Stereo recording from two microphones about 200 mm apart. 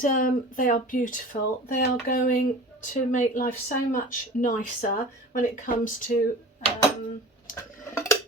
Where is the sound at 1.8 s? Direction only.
45° left (ahead or behind).